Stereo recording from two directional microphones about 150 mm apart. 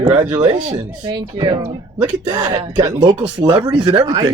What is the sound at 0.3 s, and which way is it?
Speech, 25° right (ahead or behind).